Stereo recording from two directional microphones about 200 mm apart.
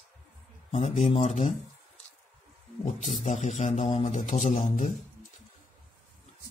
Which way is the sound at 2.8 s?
35° left (ahead or behind).